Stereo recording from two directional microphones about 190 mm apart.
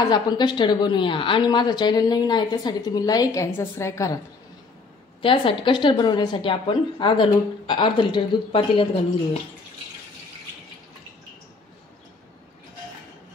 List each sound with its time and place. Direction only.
0.0 s a woman's voice: 20° left (ahead or behind)
5.2 s a woman's voice: 25° left (ahead or behind)